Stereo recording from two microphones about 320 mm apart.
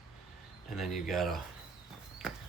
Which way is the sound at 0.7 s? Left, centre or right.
Centre.